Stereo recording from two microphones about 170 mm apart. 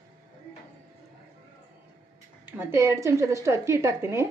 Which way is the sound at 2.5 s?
15° right (ahead or behind).